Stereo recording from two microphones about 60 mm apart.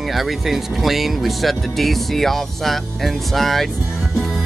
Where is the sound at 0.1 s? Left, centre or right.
Centre.